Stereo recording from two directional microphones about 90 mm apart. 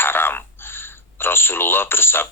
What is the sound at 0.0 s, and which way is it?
Speech, 25° left (ahead or behind).